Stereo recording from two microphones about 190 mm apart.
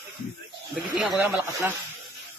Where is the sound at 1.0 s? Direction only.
10° right (ahead or behind).